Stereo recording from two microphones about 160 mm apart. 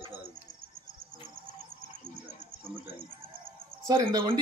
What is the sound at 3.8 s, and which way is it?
Speech, 25° right (ahead or behind).